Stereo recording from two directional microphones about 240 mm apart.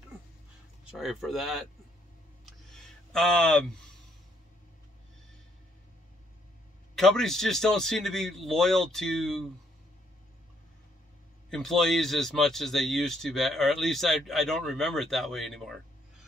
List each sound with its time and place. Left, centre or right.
0.8 s speech: centre
2.4 s a sound: centre
7.0 s speech: centre
11.5 s speech: centre